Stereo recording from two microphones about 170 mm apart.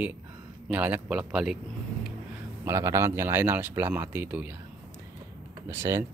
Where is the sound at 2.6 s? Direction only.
20° right (ahead or behind).